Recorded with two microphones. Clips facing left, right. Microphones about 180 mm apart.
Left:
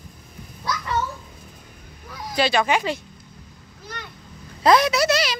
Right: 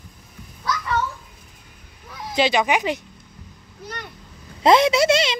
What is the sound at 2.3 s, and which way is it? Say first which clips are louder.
Speech: right 1 dB; 15° right (ahead or behind).